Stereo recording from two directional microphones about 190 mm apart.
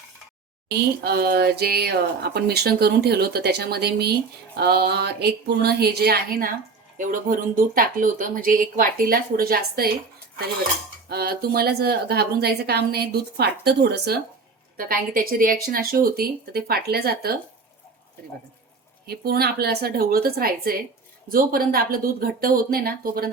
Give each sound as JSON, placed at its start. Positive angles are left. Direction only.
{"t": 1.0, "sound": "speech", "side_deg": -55}
{"t": 11.1, "sound": "speech", "side_deg": -55}
{"t": 14.8, "sound": "speech", "side_deg": -50}
{"t": 19.0, "sound": "speech", "side_deg": -55}